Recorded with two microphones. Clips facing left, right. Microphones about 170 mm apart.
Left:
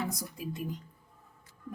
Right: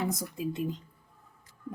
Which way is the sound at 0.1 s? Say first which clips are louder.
Right 5 dB; 25° right (ahead or behind).